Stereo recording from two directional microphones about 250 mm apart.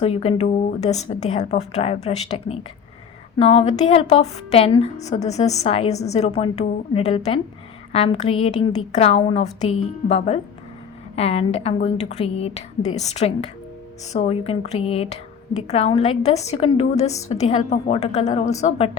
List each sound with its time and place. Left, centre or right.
0.0 s a woman's voice: left